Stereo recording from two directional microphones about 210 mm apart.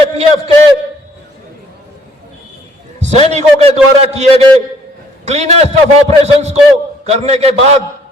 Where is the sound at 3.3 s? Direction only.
30° right (ahead or behind).